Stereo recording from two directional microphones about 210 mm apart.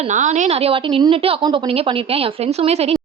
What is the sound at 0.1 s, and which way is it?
A woman's voice, 35° right (ahead or behind).